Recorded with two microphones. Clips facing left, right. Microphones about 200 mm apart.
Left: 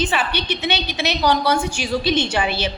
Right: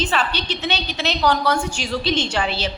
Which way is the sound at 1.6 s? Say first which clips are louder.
Left 2 dB; 5° left (ahead or behind).